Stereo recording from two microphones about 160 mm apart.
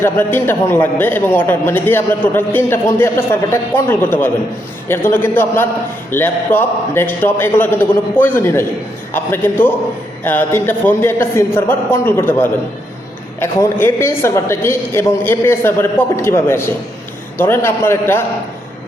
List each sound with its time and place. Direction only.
0.0 s a man's voice: 15° left (ahead or behind)